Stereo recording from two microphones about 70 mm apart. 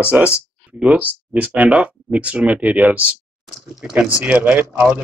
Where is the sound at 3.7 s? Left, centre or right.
Centre.